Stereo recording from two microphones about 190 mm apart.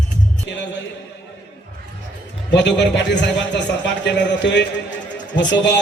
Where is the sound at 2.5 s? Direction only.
65° left (ahead or behind).